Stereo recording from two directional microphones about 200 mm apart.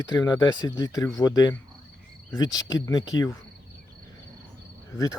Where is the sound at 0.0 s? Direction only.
20° left (ahead or behind).